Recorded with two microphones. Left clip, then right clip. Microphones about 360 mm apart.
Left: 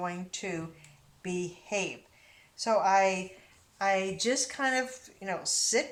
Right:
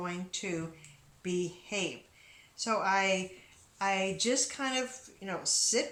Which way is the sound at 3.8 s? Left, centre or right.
Centre.